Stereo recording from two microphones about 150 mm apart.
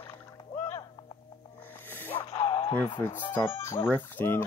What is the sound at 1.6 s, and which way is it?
Music, 15° left (ahead or behind).